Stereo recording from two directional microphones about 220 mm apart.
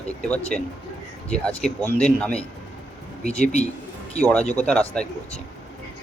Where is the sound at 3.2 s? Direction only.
30° left (ahead or behind).